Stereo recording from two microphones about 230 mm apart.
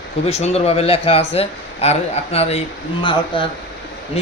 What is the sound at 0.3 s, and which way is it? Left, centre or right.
Speech, left.